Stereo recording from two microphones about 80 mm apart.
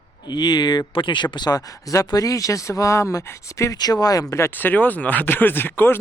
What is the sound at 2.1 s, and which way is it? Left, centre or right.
Speech, left.